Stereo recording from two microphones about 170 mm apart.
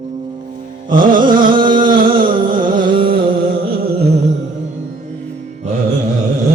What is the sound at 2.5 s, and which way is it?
Carnatic music, 25° right (ahead or behind).